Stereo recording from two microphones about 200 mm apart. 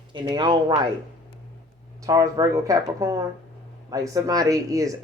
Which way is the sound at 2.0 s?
15° right (ahead or behind).